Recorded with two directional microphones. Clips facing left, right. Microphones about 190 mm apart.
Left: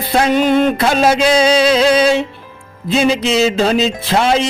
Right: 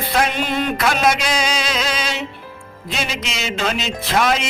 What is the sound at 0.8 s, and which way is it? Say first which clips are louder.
Music: left 6 dB; 30° left (ahead or behind).